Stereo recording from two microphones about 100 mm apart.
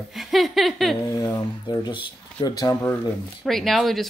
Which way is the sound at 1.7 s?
45° left (ahead or behind).